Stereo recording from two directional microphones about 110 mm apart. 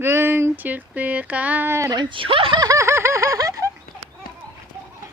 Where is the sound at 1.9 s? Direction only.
45° right (ahead or behind).